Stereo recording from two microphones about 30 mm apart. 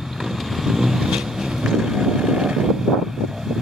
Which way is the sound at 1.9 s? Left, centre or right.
Centre.